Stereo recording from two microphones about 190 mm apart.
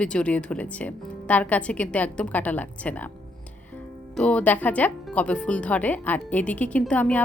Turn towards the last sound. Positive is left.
turn(degrees=5)  # may be behind; listen again after turning